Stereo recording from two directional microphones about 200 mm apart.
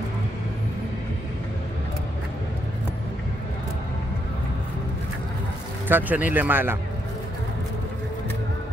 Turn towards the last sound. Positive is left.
turn(degrees=-10)  # may be behind; listen again after turning